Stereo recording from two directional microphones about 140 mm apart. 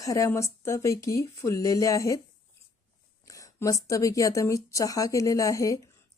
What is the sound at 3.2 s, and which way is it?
Speech, 25° left (ahead or behind).